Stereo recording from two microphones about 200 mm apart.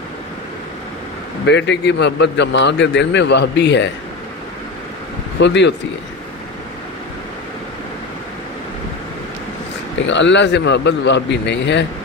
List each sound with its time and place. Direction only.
1.4 s a man's voice: 60° left (ahead or behind)
5.4 s a man's voice: 60° left (ahead or behind)
10.0 s a man's voice: 65° left (ahead or behind)